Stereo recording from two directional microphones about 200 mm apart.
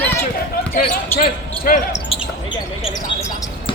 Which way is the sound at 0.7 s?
45° left (ahead or behind).